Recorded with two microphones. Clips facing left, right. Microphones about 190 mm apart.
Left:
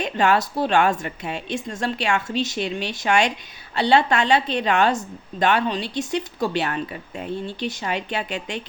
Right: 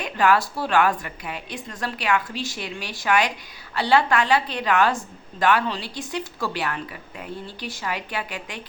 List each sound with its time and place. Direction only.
0.0 s a woman's voice: 25° left (ahead or behind)